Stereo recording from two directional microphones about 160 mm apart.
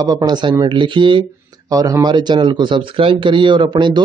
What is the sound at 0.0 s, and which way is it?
A man's voice, 25° right (ahead or behind).